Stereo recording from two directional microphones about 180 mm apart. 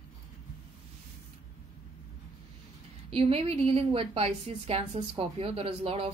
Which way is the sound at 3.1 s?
30° right (ahead or behind).